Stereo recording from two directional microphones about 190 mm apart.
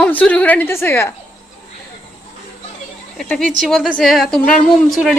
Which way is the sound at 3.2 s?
Centre (ahead or behind).